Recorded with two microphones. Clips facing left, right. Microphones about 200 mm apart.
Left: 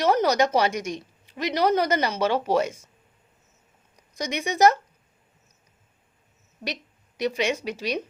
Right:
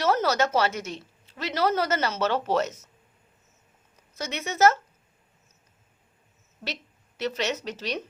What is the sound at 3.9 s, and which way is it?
Speech, 15° left (ahead or behind).